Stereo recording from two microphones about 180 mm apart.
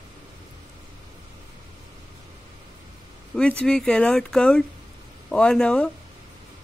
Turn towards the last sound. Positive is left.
turn(degrees=5)  # may be behind; listen again after turning